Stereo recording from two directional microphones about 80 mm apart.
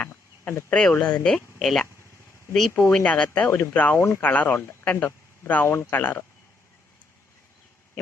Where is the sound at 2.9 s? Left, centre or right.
Centre.